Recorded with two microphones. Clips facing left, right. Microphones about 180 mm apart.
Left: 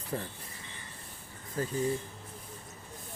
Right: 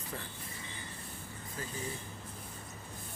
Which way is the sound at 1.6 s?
45° left (ahead or behind).